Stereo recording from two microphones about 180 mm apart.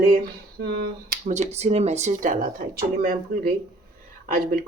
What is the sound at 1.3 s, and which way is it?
Speech, 40° right (ahead or behind).